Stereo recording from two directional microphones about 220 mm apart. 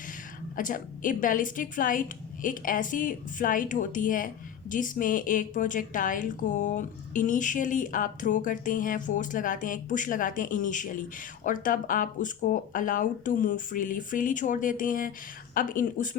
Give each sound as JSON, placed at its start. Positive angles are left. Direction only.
{"t": 0.5, "sound": "a woman's voice", "side_deg": 40}